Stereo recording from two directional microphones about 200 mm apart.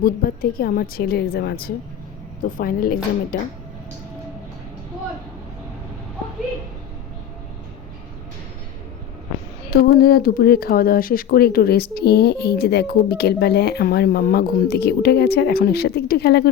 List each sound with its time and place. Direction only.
0.0 s speech: 45° left (ahead or behind)
9.8 s speech: 50° left (ahead or behind)